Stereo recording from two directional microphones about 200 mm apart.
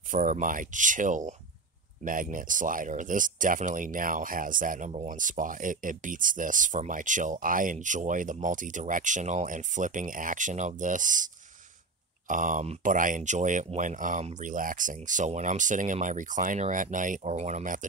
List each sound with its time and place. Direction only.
0.1 s speech: 40° right (ahead or behind)
12.3 s speech: 40° right (ahead or behind)